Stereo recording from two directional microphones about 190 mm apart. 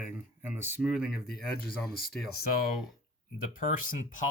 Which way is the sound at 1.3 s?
55° left (ahead or behind).